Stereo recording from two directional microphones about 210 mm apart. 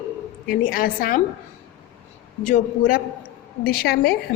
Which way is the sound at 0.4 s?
45° left (ahead or behind).